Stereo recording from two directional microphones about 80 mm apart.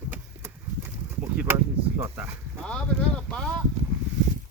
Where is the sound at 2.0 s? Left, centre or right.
Right.